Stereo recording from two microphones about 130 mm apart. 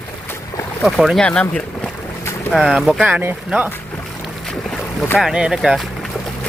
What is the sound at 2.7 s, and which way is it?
Speech, 5° right (ahead or behind).